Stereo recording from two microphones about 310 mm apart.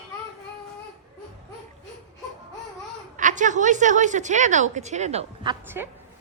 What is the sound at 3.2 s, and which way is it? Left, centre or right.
A woman's voice, right.